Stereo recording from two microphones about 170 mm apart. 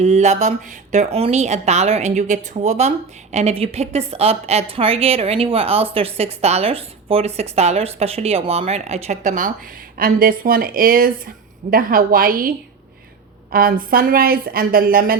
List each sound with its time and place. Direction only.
0.0 s a woman's voice: 40° right (ahead or behind); by 15.2 s 60° right (ahead or behind)